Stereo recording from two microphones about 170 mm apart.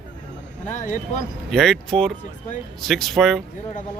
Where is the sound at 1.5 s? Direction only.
Centre (ahead or behind).